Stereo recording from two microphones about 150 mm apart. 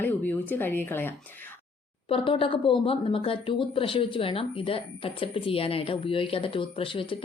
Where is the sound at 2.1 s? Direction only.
35° left (ahead or behind).